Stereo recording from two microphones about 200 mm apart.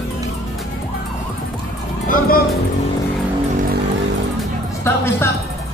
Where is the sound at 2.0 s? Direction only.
40° left (ahead or behind).